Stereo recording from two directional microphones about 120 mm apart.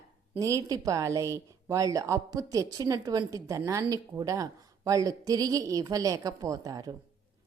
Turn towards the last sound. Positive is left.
turn(degrees=-30)  # may be behind; listen again after turning